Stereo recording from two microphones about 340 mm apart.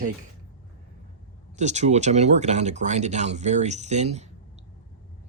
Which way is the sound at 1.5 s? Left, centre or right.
Centre.